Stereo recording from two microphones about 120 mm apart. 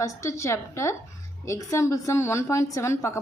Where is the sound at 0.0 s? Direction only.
25° left (ahead or behind).